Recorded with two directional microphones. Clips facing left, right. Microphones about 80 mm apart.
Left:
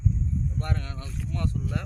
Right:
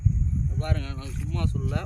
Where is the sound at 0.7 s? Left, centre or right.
Left.